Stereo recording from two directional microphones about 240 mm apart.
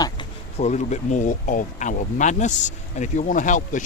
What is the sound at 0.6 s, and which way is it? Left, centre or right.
Speech, left.